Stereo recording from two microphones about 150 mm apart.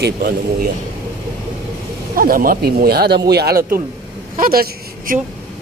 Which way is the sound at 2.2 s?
70° right (ahead or behind).